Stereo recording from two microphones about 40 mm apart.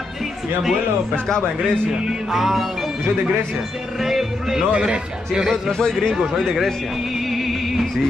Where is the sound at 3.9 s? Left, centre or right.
Centre.